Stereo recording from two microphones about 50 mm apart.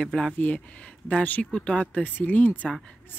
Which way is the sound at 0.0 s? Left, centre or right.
Centre.